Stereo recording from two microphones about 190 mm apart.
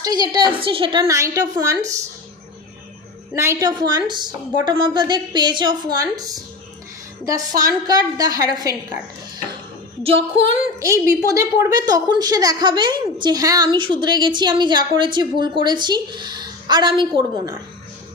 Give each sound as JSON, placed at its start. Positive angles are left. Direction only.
{"t": 0.0, "sound": "a woman's voice", "side_deg": -20}
{"t": 3.3, "sound": "a woman's voice", "side_deg": -15}
{"t": 10.0, "sound": "female singing", "side_deg": -30}
{"t": 10.8, "sound": "a woman's voice", "side_deg": -15}